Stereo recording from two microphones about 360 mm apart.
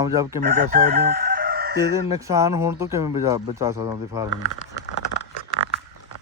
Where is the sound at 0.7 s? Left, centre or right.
Right.